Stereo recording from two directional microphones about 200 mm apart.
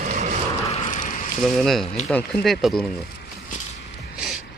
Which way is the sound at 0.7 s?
35° left (ahead or behind).